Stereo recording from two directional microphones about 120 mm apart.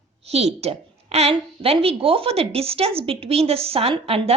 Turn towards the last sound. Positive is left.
turn(degrees=-55)  # may be behind; listen again after turning